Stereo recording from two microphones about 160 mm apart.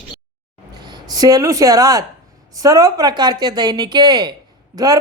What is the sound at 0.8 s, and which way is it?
A woman's voice, 25° right (ahead or behind).